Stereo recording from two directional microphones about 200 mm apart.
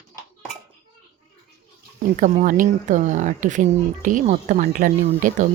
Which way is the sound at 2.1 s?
40° right (ahead or behind).